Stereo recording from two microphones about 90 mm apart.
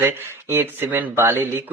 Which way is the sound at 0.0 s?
25° right (ahead or behind).